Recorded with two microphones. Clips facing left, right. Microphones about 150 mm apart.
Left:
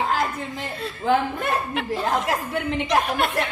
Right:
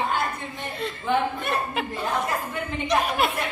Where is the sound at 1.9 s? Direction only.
90° left.